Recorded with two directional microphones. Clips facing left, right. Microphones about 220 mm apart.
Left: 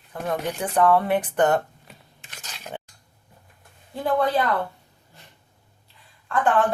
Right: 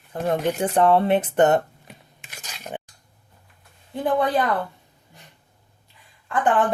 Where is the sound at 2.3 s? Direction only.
15° right (ahead or behind).